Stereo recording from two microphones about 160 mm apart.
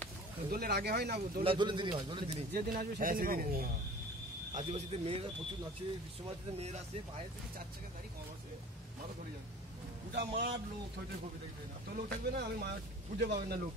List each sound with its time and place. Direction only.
0.5 s speech: 75° right (ahead or behind)
1.4 s a man's voice: 30° right (ahead or behind)
2.5 s speech: 65° right (ahead or behind)
4.6 s a man's voice: 40° right (ahead or behind)
6.5 s speech: 40° right (ahead or behind)
10.1 s speech: 90° right
11.9 s speech: 80° right
13.2 s speech: 90° right